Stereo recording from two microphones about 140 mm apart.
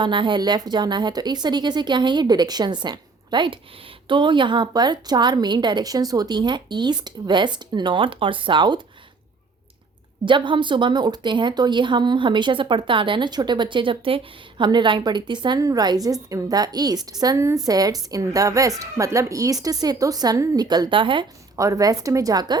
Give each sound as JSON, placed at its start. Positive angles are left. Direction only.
{"t": 0.0, "sound": "speech", "side_deg": -35}
{"t": 10.2, "sound": "a woman's voice", "side_deg": -35}
{"t": 21.6, "sound": "a woman's voice", "side_deg": -25}